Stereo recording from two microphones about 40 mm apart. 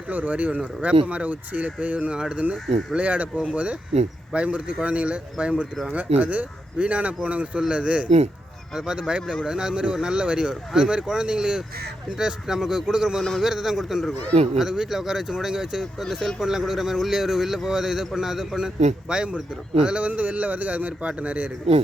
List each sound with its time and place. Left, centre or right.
0.1 s speech: right
2.3 s a man's voice: right
16.0 s speech: centre
16.4 s a man's voice: centre
20.1 s speech: right